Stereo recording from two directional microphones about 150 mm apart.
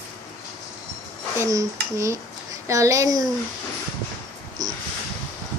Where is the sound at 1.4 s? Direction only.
20° right (ahead or behind).